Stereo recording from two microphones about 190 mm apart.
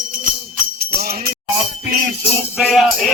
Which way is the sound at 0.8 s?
55° right (ahead or behind).